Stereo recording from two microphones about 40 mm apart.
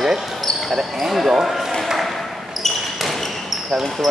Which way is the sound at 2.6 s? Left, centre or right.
Centre.